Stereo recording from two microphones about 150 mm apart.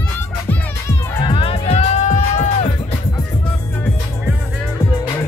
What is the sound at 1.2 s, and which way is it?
Music, 35° left (ahead or behind).